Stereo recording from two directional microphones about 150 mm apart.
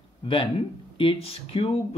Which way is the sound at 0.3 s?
35° left (ahead or behind).